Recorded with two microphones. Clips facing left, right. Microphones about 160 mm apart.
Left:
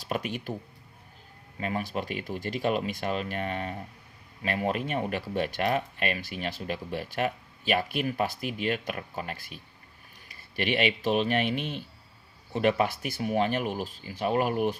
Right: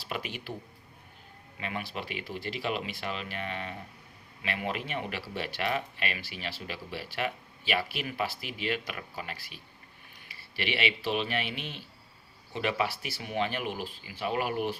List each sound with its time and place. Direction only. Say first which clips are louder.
0.0 s speech: left 5 dB; 45° left (ahead or behind)
1.5 s speech: left 6 dB; 40° left (ahead or behind)